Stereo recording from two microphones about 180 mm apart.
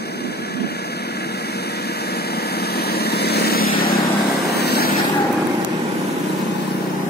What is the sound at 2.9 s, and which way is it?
Vehicle, 60° left (ahead or behind).